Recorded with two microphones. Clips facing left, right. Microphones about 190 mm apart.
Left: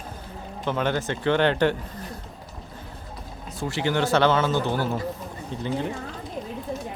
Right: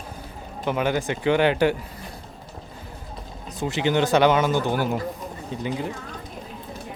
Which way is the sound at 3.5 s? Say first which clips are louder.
Right 3 dB; 20° right (ahead or behind).